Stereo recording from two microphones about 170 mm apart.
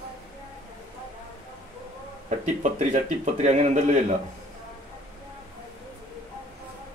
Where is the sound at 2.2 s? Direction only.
45° right (ahead or behind).